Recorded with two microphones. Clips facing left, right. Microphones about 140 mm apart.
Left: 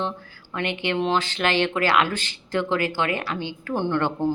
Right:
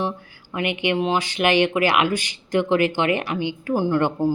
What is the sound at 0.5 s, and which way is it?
Speech, 15° right (ahead or behind).